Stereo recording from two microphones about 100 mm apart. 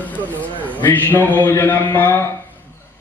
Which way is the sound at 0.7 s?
20° left (ahead or behind).